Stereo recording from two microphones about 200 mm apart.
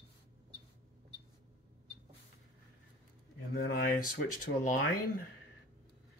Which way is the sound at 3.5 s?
45° left (ahead or behind).